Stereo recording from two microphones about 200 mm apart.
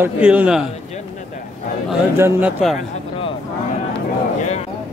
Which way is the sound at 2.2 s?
10° right (ahead or behind).